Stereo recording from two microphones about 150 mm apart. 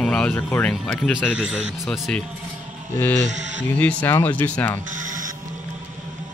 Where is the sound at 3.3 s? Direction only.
55° right (ahead or behind).